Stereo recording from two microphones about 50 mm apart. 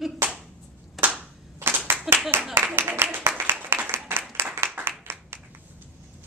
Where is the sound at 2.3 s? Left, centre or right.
Right.